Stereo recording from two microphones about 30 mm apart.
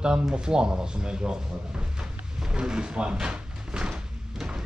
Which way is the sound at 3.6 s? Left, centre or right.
Right.